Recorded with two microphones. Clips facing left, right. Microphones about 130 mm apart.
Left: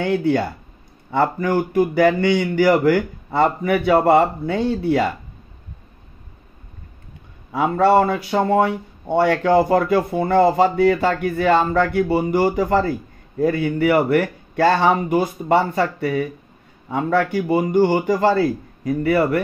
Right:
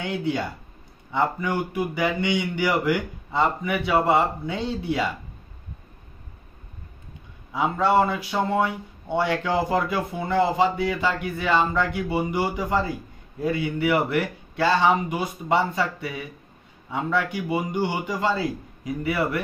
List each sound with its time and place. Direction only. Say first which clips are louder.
0.0 s a man's voice: left 8 dB; 55° left (ahead or behind)
7.5 s speech: left 5 dB; 55° left (ahead or behind)
18.1 s a man's voice: left 8 dB; 60° left (ahead or behind)